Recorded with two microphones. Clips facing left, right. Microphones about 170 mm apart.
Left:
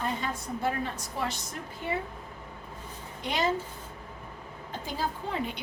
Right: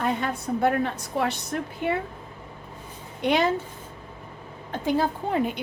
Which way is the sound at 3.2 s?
65° right (ahead or behind).